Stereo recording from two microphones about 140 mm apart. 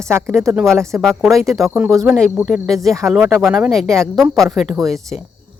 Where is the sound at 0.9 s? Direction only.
5° right (ahead or behind).